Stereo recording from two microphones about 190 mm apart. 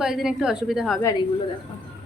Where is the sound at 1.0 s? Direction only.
15° left (ahead or behind).